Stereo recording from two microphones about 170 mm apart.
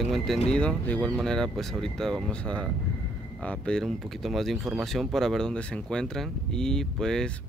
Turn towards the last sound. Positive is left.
turn(degrees=5)  # may be behind; listen again after turning